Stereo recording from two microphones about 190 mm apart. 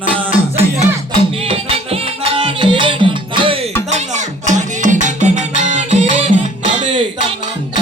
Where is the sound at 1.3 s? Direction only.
30° right (ahead or behind).